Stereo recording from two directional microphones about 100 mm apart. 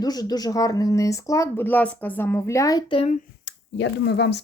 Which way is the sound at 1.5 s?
20° left (ahead or behind).